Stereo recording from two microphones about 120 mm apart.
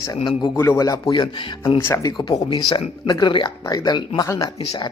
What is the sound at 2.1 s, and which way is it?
Speech, 40° left (ahead or behind).